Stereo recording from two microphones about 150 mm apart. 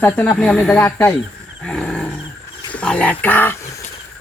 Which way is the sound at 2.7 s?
5° left (ahead or behind).